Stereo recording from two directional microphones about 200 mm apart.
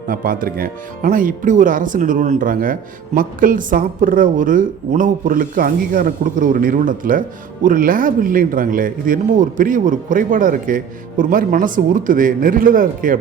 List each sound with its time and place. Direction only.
0.1 s speech: 45° right (ahead or behind)